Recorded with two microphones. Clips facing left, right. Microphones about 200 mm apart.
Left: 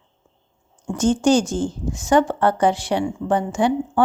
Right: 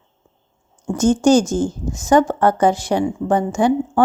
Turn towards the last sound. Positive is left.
turn(degrees=-45)  # may be behind; listen again after turning